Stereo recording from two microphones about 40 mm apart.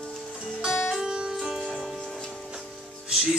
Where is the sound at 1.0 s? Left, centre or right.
Centre.